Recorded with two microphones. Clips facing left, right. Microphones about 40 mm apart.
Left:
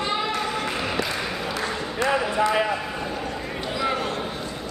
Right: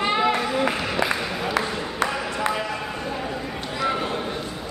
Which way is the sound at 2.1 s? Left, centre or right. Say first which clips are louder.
Left 4 dB; centre.